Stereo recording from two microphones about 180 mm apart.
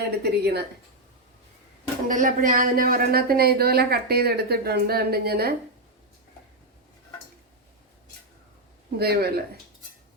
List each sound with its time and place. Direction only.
0.2 s a woman's voice: 65° right (ahead or behind)
2.0 s a woman's voice: 50° right (ahead or behind)
9.0 s a woman's voice: 60° right (ahead or behind)